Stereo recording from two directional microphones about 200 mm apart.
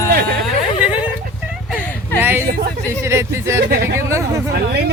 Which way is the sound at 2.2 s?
10° right (ahead or behind).